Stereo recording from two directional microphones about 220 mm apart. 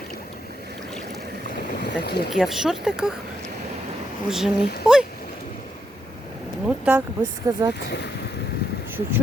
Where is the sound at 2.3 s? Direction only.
Centre (ahead or behind).